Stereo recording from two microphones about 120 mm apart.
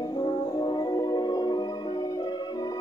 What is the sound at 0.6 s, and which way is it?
Music, 35° left (ahead or behind).